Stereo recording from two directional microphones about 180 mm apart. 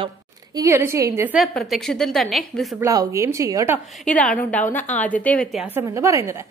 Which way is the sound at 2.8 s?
20° right (ahead or behind).